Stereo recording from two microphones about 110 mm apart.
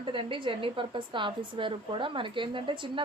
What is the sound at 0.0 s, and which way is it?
A woman's voice, 50° right (ahead or behind).